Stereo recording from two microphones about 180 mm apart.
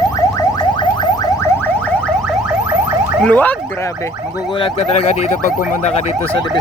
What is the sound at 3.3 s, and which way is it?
Speech, 10° left (ahead or behind).